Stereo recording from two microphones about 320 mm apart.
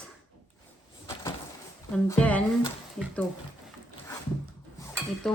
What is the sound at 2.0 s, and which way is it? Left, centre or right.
Speech, centre.